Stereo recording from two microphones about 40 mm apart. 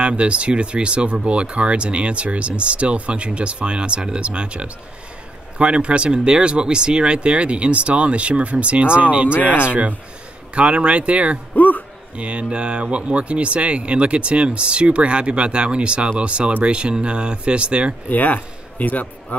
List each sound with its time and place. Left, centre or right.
0.0 s speech: right
11.5 s music: left
12.2 s speech: right
18.1 s a man's voice: left